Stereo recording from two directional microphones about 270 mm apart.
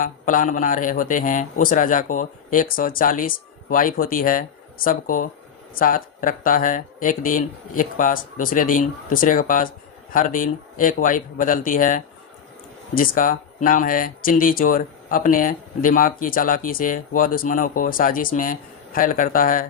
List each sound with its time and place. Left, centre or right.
0.0 s speech: left